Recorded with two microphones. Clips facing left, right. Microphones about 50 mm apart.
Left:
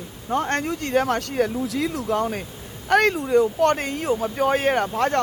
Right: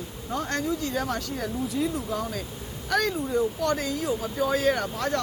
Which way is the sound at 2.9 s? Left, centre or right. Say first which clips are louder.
Left 7 dB; left.